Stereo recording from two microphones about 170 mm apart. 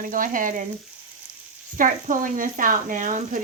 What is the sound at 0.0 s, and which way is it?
Speech, 55° right (ahead or behind).